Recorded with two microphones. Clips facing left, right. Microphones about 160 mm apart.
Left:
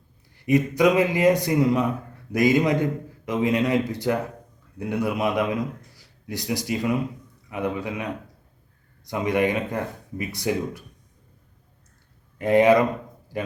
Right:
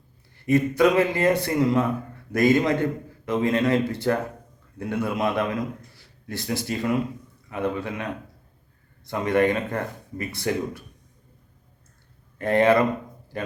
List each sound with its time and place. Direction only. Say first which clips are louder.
0.3 s a man's voice: even; 15° left (ahead or behind)
12.4 s a man's voice: left 2 dB; 15° left (ahead or behind)